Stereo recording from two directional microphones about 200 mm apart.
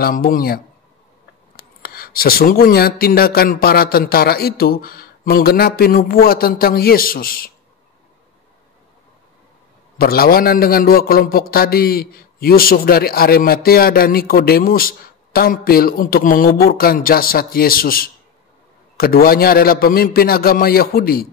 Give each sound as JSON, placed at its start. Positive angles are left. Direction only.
{"t": 0.0, "sound": "a man's voice", "side_deg": 45}
{"t": 1.6, "sound": "a man's voice", "side_deg": 50}
{"t": 9.9, "sound": "a man's voice", "side_deg": 50}